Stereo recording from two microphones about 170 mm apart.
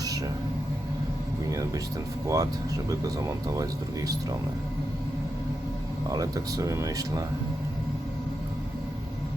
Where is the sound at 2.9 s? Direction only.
20° right (ahead or behind).